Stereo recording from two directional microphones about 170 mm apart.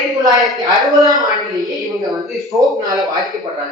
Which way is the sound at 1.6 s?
Centre (ahead or behind).